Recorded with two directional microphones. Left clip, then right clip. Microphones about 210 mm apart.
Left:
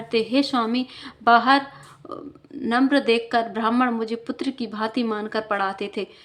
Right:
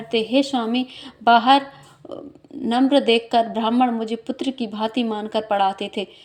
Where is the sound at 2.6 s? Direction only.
5° right (ahead or behind).